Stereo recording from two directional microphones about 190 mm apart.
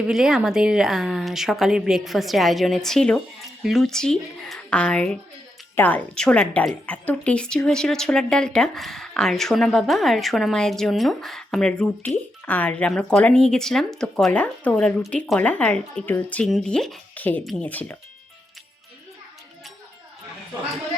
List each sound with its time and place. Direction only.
0.0 s a woman's voice: 5° right (ahead or behind)